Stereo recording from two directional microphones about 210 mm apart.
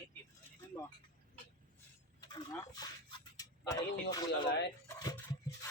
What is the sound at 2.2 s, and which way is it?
Speech, 20° left (ahead or behind).